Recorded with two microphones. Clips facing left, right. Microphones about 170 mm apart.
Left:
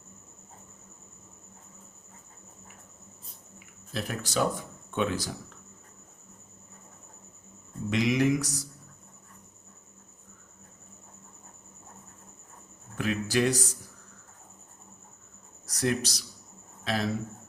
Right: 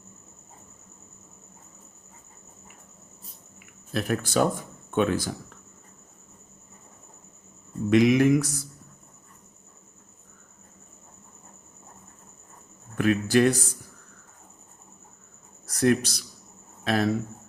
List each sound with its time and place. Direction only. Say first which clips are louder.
3.9 s speech: right 6 dB; 55° right (ahead or behind)
7.9 s mantra: right 6 dB; 55° right (ahead or behind)
13.0 s mantra: right 6 dB; 55° right (ahead or behind)
15.6 s a man's voice: right 7 dB; 55° right (ahead or behind)